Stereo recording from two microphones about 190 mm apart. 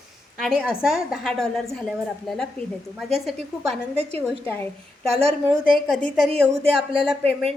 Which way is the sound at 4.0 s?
35° right (ahead or behind).